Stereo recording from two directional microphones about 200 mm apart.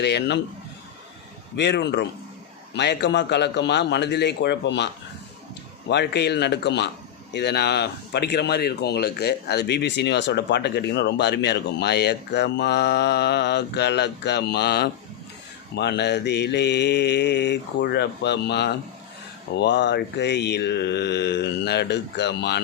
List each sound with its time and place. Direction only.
0.0 s speech: 60° left (ahead or behind)
1.5 s speech: 55° left (ahead or behind)
5.9 s speech: 55° left (ahead or behind)